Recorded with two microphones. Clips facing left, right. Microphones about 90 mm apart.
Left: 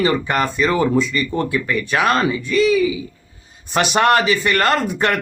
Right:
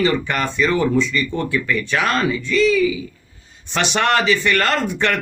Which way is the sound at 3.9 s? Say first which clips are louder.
Left 2 dB; 40° left (ahead or behind).